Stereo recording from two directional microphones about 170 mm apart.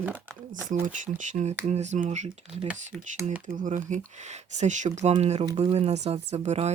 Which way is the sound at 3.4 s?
50° right (ahead or behind).